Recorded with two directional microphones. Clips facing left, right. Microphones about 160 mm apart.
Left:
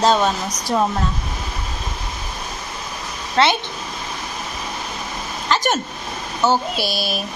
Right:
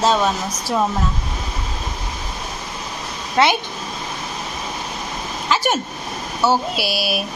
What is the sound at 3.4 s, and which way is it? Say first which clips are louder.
Speech: even; 15° right (ahead or behind).